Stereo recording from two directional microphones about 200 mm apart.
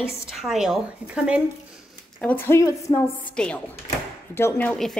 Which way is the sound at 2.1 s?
10° left (ahead or behind).